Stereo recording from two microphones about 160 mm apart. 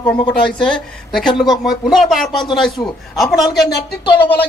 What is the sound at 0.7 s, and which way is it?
A woman's voice, centre (ahead or behind).